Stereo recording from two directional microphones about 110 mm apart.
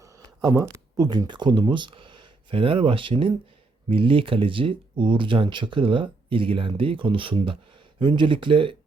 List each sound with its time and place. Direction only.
0.0 s speech: 25° right (ahead or behind); by 8.7 s 50° right (ahead or behind)